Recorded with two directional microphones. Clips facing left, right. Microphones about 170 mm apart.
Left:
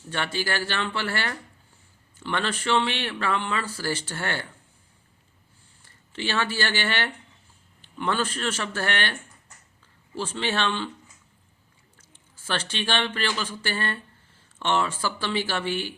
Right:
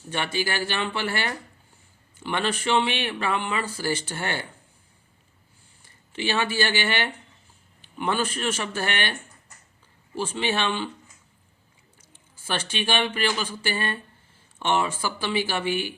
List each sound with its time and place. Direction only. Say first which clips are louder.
0.1 s speech: right 1 dB; 15° right (ahead or behind)
6.1 s speech: right 2 dB; 15° right (ahead or behind)
10.2 s speech: right 1 dB; 15° right (ahead or behind)
12.5 s speech: right 1 dB; 15° right (ahead or behind)